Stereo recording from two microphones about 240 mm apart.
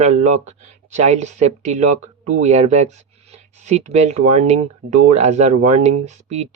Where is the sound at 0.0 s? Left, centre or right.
Right.